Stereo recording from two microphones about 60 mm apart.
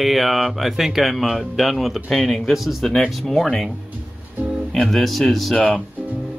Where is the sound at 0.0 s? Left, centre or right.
Centre.